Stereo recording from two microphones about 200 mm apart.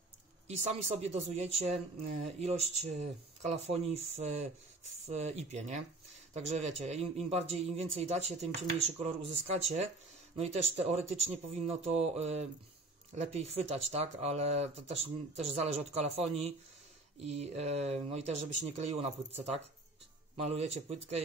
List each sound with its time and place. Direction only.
0.5 s speech: 35° right (ahead or behind)